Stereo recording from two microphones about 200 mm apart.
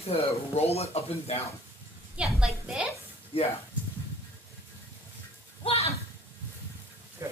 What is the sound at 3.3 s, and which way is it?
Speech, 30° left (ahead or behind).